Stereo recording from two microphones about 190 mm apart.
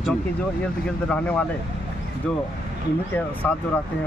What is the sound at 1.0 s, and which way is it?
Speech, 10° left (ahead or behind).